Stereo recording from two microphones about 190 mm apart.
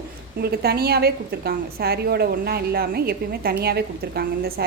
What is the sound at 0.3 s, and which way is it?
A woman's voice, 55° right (ahead or behind).